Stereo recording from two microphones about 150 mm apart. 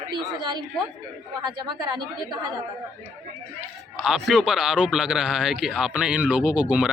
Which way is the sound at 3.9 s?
Centre (ahead or behind).